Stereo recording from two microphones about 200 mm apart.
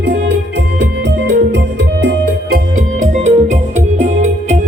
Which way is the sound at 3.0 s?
35° right (ahead or behind).